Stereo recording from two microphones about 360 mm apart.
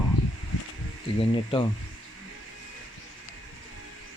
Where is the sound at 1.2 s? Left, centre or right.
Centre.